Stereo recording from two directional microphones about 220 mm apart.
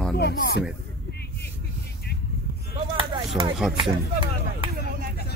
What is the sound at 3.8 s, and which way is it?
Speech, 20° right (ahead or behind).